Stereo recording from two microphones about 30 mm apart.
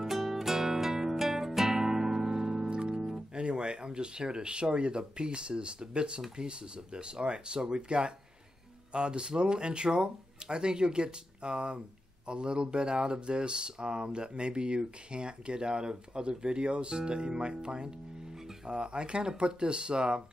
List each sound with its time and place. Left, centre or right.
0.0 s music: centre
2.7 s music: right
3.3 s speech: right